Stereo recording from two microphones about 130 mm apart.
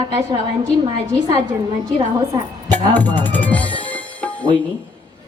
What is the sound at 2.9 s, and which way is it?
Music, 15° left (ahead or behind).